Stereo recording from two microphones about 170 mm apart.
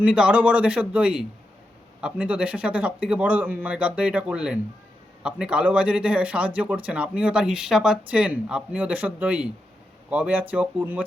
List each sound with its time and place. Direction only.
0.0 s a man's voice: 5° right (ahead or behind)